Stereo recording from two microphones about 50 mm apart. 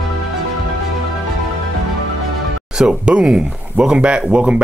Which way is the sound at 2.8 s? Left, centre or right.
Centre.